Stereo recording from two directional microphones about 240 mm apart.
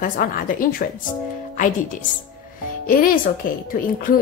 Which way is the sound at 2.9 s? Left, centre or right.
Left.